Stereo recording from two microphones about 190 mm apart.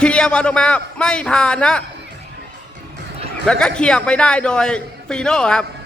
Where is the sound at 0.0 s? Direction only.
5° left (ahead or behind).